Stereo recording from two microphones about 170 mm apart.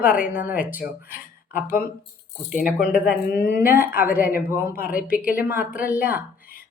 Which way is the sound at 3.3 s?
60° left (ahead or behind).